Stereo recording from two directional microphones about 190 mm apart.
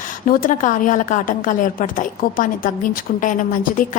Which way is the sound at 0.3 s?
45° left (ahead or behind).